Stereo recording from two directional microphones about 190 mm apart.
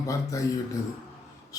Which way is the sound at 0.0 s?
15° left (ahead or behind).